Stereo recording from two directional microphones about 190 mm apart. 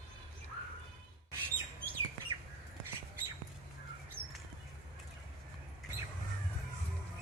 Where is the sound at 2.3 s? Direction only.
20° right (ahead or behind).